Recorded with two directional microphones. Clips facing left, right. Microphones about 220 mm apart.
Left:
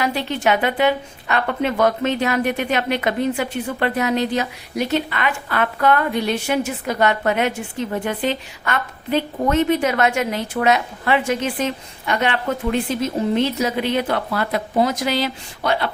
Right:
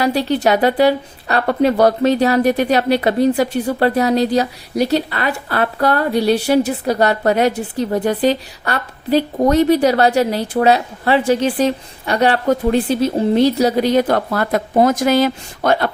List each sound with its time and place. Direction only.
0.0 s a woman's voice: 35° right (ahead or behind)